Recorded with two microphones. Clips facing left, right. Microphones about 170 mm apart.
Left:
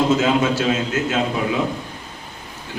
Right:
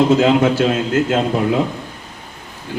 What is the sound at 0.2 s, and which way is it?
A man's voice, 60° right (ahead or behind).